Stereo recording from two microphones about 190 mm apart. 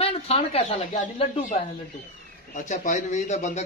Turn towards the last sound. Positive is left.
turn(degrees=35)  # may be behind; listen again after turning